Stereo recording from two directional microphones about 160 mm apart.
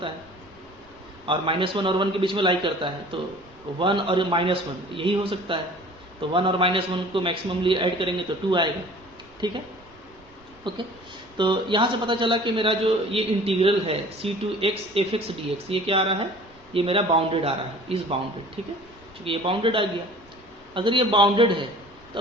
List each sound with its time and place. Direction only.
1.3 s a man's voice: 35° right (ahead or behind)
10.7 s a man's voice: 30° right (ahead or behind)
22.1 s a sound: 30° right (ahead or behind)